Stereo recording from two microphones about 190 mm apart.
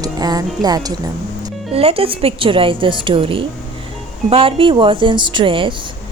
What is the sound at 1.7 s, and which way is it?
A woman's voice, 30° right (ahead or behind).